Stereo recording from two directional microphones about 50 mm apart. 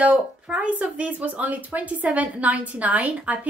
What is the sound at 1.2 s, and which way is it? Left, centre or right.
A woman's voice, right.